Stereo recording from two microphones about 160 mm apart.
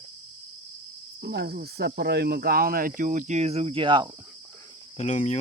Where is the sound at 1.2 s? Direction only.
90° right; by 4.1 s 30° right (ahead or behind).